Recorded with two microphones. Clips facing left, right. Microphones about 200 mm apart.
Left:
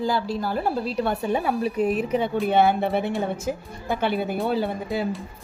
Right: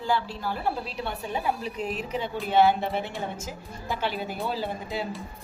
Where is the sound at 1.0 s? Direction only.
50° left (ahead or behind).